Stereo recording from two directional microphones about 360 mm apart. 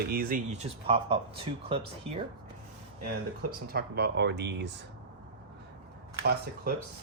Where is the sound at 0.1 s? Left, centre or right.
Right.